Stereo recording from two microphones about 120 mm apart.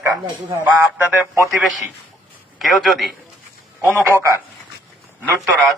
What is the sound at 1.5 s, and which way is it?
A man's voice, centre (ahead or behind).